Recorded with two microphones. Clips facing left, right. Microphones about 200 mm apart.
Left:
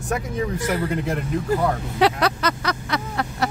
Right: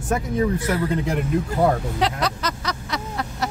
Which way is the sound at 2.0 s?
60° left (ahead or behind).